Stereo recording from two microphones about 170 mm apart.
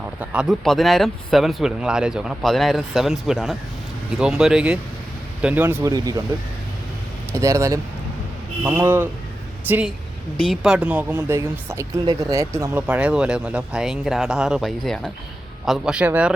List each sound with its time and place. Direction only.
0.2 s speech: 5° right (ahead or behind); by 6.2 s 20° right (ahead or behind)
7.3 s speech: 15° right (ahead or behind)